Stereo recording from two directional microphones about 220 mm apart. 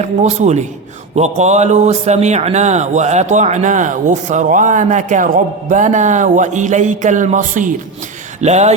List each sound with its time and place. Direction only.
0.0 s speech: 30° right (ahead or behind)